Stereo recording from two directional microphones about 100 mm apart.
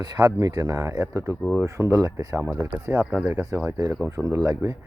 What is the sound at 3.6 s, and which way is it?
Speech, 30° right (ahead or behind).